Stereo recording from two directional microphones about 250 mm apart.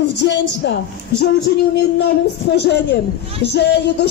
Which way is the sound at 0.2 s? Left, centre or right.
Left.